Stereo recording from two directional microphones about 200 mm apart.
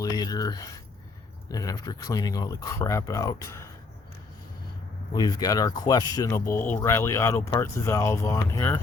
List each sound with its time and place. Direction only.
0.0 s speech: 20° left (ahead or behind)
5.1 s speech: 20° left (ahead or behind)